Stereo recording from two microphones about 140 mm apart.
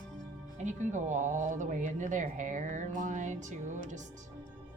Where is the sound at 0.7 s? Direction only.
60° right (ahead or behind).